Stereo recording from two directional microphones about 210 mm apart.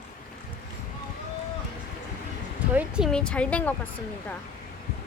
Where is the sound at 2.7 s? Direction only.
5° right (ahead or behind).